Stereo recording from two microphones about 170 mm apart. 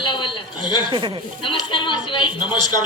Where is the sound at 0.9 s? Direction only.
30° right (ahead or behind).